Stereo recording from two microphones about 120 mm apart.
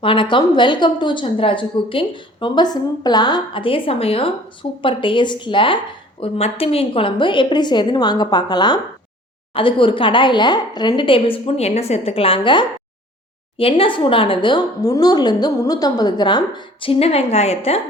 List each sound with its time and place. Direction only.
0.0 s a woman's voice: 45° left (ahead or behind)
9.5 s a woman's voice: 45° left (ahead or behind)